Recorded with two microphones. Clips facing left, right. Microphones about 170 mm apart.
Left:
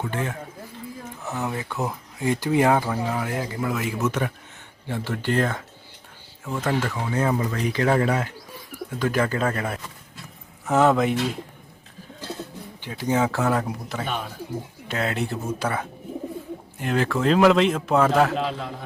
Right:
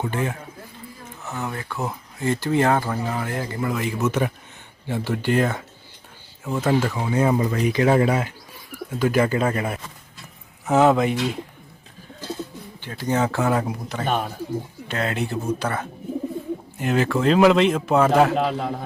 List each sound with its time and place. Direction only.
0.1 s speech: 15° right (ahead or behind)
1.4 s speech: 20° left (ahead or behind); by 4.1 s centre (ahead or behind)
4.9 s speech: 10° right (ahead or behind)
10.7 s speech: centre (ahead or behind)
12.8 s speech: 10° left (ahead or behind)
14.0 s a man's voice: 50° right (ahead or behind)
14.8 s speech: centre (ahead or behind)
16.8 s speech: 5° right (ahead or behind)
18.3 s a man's voice: 55° right (ahead or behind)